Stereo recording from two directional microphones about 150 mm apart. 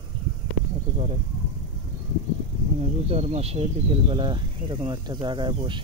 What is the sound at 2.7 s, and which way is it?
Speech, 40° right (ahead or behind).